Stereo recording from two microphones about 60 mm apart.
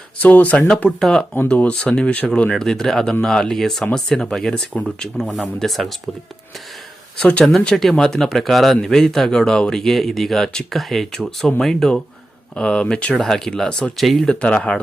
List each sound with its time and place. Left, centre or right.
0.2 s speech: left
0.9 s a man's voice: centre; by 2.5 s left
2.5 s a man's voice: centre
5.1 s speech: centre
7.2 s a man's voice: centre
13.2 s a man's voice: centre
13.9 s speech: centre
14.3 s a man's voice: centre